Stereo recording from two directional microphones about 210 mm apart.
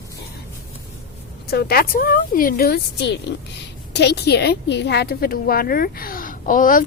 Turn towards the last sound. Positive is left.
turn(degrees=40)  # may be behind; listen again after turning